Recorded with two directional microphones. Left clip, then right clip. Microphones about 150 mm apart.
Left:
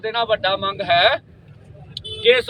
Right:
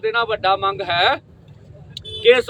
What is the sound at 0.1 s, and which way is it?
A man's voice, 25° right (ahead or behind).